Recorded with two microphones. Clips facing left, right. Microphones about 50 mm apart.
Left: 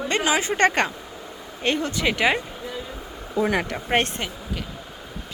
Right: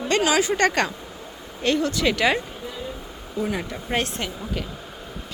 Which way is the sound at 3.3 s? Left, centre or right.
Left.